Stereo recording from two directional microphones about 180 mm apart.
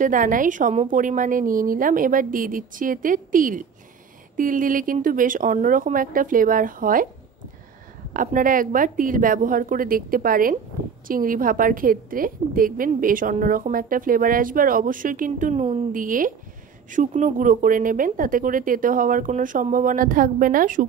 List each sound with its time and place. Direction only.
0.0 s a woman's voice: 50° right (ahead or behind)
8.1 s a woman's voice: 50° right (ahead or behind)